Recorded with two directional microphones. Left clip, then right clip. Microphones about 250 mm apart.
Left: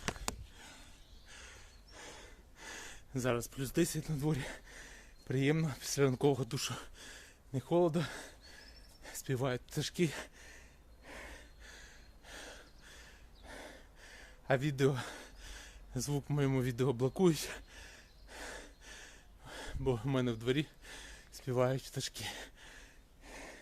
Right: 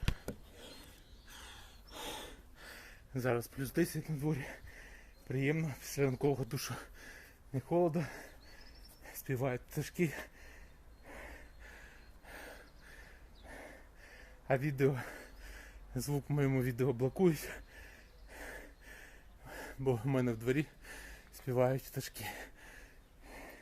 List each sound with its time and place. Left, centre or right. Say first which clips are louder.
1.3 s gasp: right 1 dB; centre
1.9 s snort: right 7 dB; right
2.6 s a sound: left 6 dB; left
3.1 s speech: even; centre
11.0 s a sound: left 1 dB; centre
13.5 s gasp: left 1 dB; centre
16.0 s speech: even; centre
18.3 s gasp: left 1 dB; centre
19.5 s a sound: right 1 dB; centre
23.3 s wheeze: left 1 dB; centre